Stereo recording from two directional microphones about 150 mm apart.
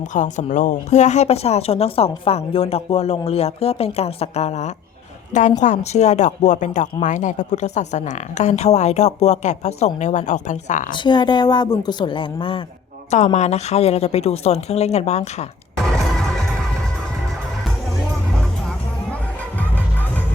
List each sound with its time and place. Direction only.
0.1 s a woman's voice: 55° left (ahead or behind)
10.9 s a woman's voice: 30° left (ahead or behind)
13.1 s a woman's voice: 50° left (ahead or behind)
19.5 s music: 10° left (ahead or behind)